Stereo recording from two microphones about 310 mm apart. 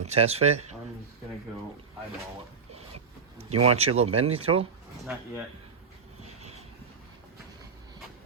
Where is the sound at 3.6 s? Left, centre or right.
Centre.